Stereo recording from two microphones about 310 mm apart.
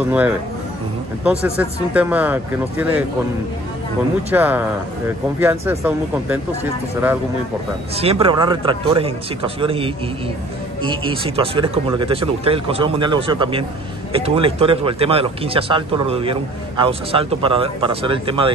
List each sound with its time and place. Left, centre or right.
1.4 s speech: centre
4.3 s speech: centre
7.9 s speech: centre